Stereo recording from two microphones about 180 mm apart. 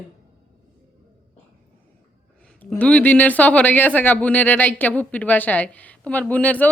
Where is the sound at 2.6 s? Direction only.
10° left (ahead or behind).